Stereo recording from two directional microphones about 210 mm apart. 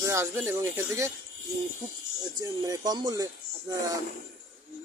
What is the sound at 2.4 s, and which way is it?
Speech, 15° right (ahead or behind).